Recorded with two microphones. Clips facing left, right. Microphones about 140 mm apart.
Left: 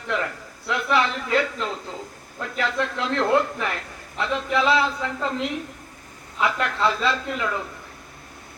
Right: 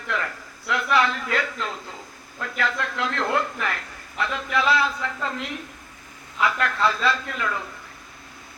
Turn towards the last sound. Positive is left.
turn(degrees=20)  # may be behind; listen again after turning